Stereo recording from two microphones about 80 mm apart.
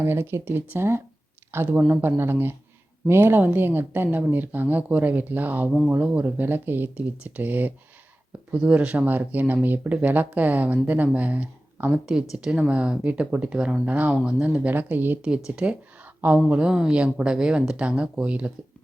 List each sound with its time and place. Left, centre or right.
0.0 s speech: right
15.4 s speech: centre